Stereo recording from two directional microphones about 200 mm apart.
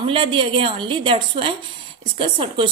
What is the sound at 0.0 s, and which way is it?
A woman's voice, 25° right (ahead or behind).